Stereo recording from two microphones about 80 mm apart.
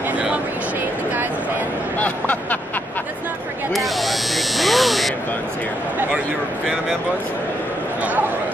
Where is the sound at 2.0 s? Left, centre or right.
Centre.